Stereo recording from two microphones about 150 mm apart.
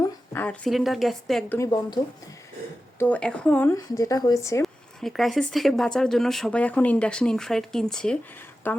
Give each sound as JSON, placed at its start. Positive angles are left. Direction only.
{"t": 0.0, "sound": "speech", "side_deg": 10}
{"t": 1.5, "sound": "speech", "side_deg": 20}
{"t": 3.0, "sound": "speech", "side_deg": 10}
{"t": 3.8, "sound": "speech", "side_deg": 25}
{"t": 4.6, "sound": "speech", "side_deg": 0}